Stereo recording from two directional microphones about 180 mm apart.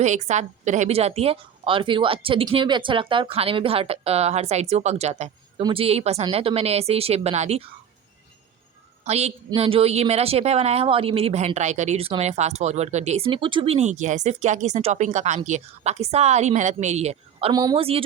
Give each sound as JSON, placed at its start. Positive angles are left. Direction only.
{"t": 0.0, "sound": "speech", "side_deg": -40}
{"t": 9.0, "sound": "speech", "side_deg": -35}
{"t": 17.5, "sound": "a woman's voice", "side_deg": -20}